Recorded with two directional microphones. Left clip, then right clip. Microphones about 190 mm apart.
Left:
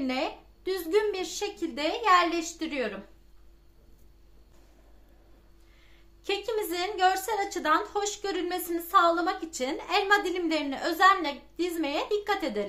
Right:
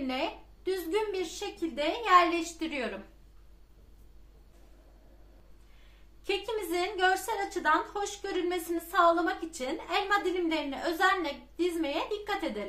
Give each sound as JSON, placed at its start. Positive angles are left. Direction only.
{"t": 0.0, "sound": "a woman's voice", "side_deg": 40}
{"t": 6.2, "sound": "a woman's voice", "side_deg": 45}